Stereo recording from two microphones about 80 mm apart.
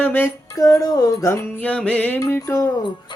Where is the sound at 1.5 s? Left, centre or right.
Centre.